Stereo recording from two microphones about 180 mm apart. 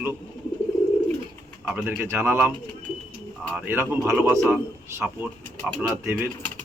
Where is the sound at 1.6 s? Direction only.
10° right (ahead or behind).